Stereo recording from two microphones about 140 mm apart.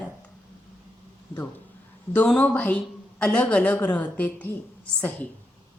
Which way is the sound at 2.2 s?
10° left (ahead or behind).